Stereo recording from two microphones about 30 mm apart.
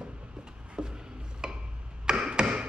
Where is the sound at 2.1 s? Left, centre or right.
Right.